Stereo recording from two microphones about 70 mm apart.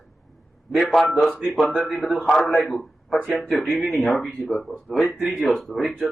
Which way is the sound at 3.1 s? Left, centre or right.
Centre.